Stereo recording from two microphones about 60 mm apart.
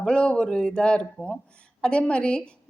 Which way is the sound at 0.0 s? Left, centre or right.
Centre.